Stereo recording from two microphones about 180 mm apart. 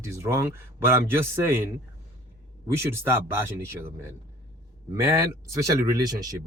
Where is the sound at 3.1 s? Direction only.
15° right (ahead or behind).